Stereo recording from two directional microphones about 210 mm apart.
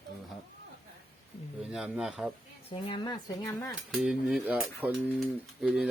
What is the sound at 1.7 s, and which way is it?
Speech, centre (ahead or behind).